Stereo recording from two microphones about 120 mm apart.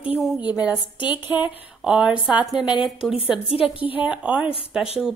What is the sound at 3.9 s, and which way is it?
Speech, 10° right (ahead or behind).